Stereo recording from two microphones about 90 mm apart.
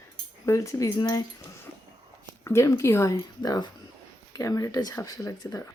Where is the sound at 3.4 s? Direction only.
50° left (ahead or behind).